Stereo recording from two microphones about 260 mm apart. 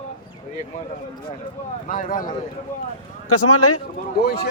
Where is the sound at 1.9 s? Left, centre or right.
Left.